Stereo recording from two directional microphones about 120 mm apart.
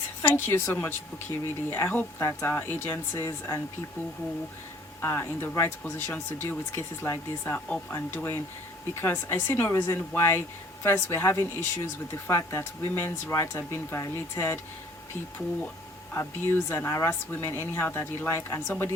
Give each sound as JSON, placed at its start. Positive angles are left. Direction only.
{"t": 0.2, "sound": "speech", "side_deg": 15}
{"t": 4.9, "sound": "speech", "side_deg": 20}
{"t": 16.6, "sound": "speech", "side_deg": 20}